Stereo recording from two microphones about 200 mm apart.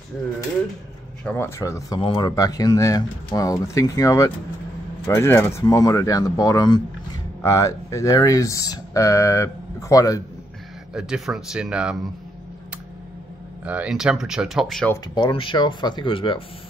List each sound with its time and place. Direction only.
1.2 s speech: 10° left (ahead or behind)
10.9 s speech: 5° right (ahead or behind)
13.7 s speech: 5° right (ahead or behind)
15.1 s speech: 25° left (ahead or behind)